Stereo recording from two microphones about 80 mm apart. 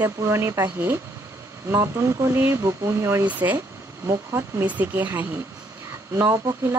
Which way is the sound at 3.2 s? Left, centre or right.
Right.